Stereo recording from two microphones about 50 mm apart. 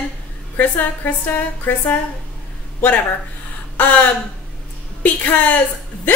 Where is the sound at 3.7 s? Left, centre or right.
Left.